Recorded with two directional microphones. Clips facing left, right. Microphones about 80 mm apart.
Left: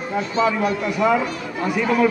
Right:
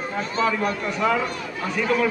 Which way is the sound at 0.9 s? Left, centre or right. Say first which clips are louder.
Left 4 dB; centre.